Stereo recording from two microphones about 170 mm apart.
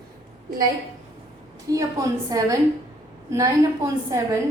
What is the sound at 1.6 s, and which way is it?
Speech, 20° right (ahead or behind).